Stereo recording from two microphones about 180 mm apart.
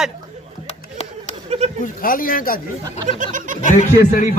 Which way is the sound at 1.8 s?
50° left (ahead or behind).